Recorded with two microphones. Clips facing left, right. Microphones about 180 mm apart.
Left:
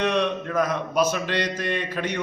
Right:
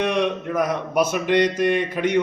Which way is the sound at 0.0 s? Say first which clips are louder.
Right 2 dB; 15° right (ahead or behind).